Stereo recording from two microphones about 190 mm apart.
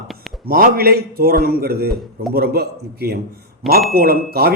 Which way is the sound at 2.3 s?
55° right (ahead or behind).